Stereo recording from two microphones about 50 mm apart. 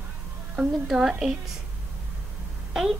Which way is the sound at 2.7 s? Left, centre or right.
Centre.